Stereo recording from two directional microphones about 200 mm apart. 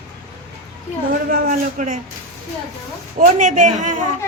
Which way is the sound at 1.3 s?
40° right (ahead or behind).